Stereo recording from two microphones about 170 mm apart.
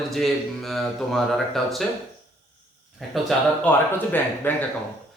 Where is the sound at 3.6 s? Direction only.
10° left (ahead or behind).